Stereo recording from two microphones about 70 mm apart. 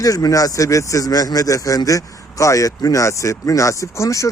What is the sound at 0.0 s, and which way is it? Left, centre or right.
Speech, left.